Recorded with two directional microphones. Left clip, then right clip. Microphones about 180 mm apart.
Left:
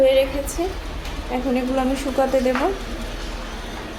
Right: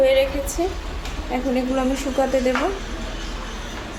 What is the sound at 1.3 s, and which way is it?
Speech, 5° left (ahead or behind).